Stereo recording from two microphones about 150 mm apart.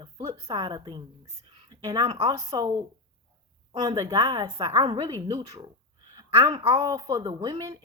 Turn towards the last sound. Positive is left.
turn(degrees=-30)  # may be behind; listen again after turning